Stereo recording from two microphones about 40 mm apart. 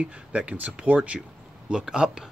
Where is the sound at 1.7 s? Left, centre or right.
Centre.